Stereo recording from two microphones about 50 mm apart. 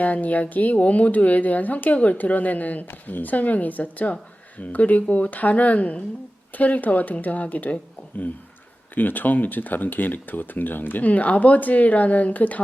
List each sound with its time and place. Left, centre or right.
0.0 s speech: left
9.0 s speech: left